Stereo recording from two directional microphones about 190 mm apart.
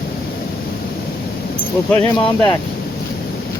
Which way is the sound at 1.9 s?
5° left (ahead or behind).